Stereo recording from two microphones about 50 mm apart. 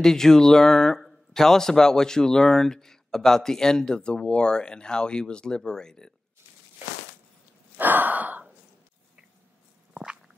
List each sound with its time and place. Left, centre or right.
0.0 s speech: centre
7.7 s sigh: right